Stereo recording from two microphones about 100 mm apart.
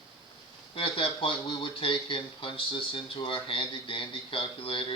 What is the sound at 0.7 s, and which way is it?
Speech, 60° left (ahead or behind).